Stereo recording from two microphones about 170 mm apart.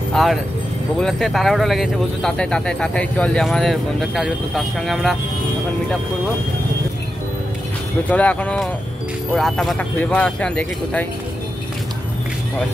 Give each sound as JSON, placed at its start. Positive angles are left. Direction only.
{"t": 0.1, "sound": "speech", "side_deg": 0}
{"t": 8.1, "sound": "speech", "side_deg": 10}